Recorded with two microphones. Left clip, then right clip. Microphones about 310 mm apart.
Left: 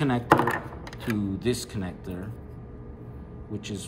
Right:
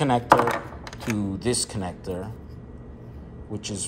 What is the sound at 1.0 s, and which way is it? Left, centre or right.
A man's voice, centre.